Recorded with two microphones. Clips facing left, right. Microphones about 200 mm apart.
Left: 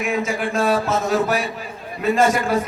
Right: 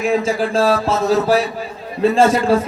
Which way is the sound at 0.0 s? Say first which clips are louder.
Right 5 dB; 30° right (ahead or behind).